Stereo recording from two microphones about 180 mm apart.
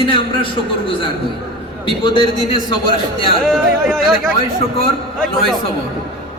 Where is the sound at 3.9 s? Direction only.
5° left (ahead or behind).